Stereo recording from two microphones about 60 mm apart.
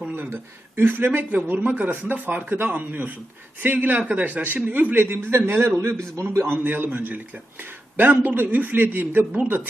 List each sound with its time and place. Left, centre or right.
0.8 s a man's voice: right
5.1 s a man's voice: right
6.7 s a man's voice: right
8.2 s a man's voice: right